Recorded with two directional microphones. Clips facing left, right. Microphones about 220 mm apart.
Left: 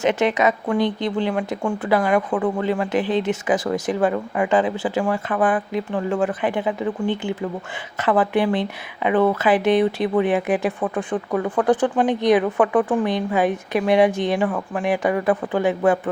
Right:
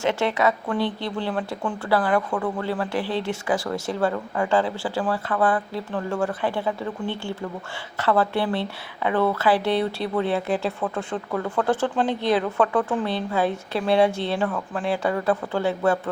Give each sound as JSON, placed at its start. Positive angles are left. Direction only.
{"t": 0.0, "sound": "speech", "side_deg": 20}